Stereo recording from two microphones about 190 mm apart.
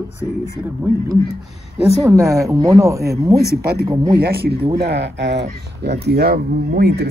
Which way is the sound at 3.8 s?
20° right (ahead or behind).